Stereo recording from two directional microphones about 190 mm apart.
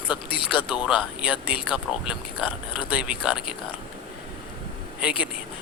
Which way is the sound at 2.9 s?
5° right (ahead or behind).